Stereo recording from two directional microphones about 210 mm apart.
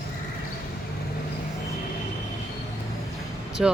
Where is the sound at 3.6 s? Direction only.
5° right (ahead or behind).